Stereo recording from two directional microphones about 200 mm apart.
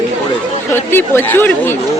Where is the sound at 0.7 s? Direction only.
10° left (ahead or behind).